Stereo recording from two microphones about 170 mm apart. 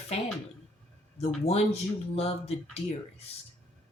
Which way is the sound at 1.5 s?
35° left (ahead or behind).